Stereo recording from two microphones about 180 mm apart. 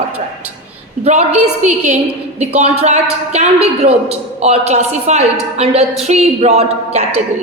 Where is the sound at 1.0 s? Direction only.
40° right (ahead or behind).